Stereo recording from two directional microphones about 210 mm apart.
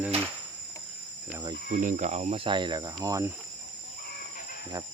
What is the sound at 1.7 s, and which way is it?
Speech, 35° right (ahead or behind).